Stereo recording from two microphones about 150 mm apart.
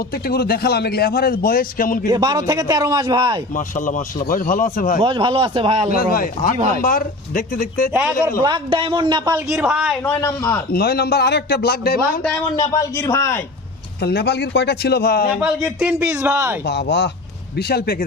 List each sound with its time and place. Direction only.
0.1 s a man's voice: 90° left; by 2.0 s 70° left (ahead or behind)
2.0 s a man's voice: 25° right (ahead or behind)
3.5 s a man's voice: 60° left (ahead or behind)
4.9 s a man's voice: 35° right (ahead or behind)
5.9 s a man's voice: 75° left (ahead or behind)
8.4 s a man's voice: 35° right (ahead or behind)
9.6 s speech: 5° right (ahead or behind)
10.0 s a man's voice: 20° left (ahead or behind)
10.7 s a man's voice: 90° left
12.7 s a man's voice: 20° left (ahead or behind)
14.0 s a man's voice: 90° left
15.4 s speech: 5° right (ahead or behind)
16.6 s a man's voice: 90° left